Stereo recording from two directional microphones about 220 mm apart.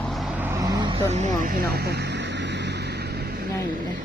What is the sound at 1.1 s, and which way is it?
Vehicle, 35° right (ahead or behind).